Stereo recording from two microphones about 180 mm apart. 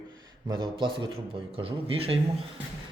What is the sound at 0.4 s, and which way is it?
A man's voice, 25° right (ahead or behind).